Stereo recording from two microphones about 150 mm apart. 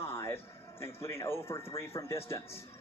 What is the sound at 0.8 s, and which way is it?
Speech, 15° left (ahead or behind).